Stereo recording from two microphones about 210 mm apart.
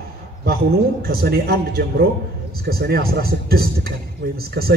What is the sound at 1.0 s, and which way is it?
A man's voice, 50° right (ahead or behind).